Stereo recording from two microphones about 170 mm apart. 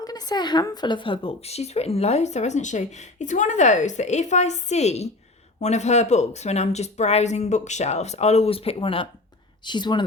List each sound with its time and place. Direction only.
0.0 s speech: 20° left (ahead or behind)